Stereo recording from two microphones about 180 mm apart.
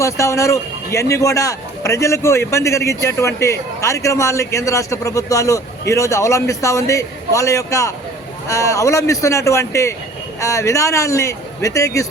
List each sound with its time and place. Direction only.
0.0 s a man's voice: 15° left (ahead or behind)